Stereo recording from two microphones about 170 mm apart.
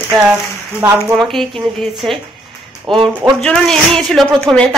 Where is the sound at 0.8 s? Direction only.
15° right (ahead or behind).